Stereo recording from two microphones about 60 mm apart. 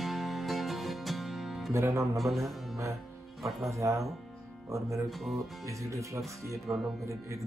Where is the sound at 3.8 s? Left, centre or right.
Right.